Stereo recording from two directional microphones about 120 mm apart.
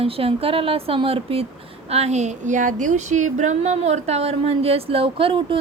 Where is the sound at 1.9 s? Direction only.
65° right (ahead or behind).